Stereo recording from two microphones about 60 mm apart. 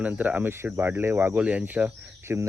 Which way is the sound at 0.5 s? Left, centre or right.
Right.